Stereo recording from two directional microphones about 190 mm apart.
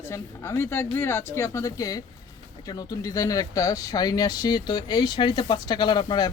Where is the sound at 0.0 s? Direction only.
15° left (ahead or behind).